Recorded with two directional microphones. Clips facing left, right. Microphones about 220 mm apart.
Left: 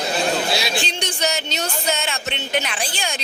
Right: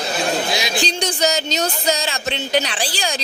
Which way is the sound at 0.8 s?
40° right (ahead or behind).